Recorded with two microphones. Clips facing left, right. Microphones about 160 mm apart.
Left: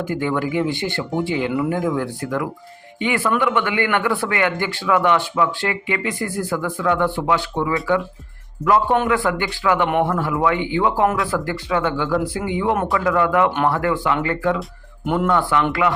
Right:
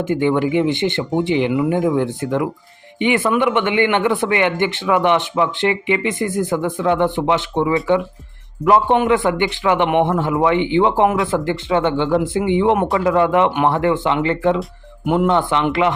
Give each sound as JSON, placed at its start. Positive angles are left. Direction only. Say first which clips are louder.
{"t": 0.0, "sound": "speech", "louder": "right 5 dB", "side_deg": -20}
{"t": 14.6, "sound": "speech", "louder": "right 3 dB", "side_deg": -5}
{"t": 15.3, "sound": "speech", "louder": "right 2 dB", "side_deg": -20}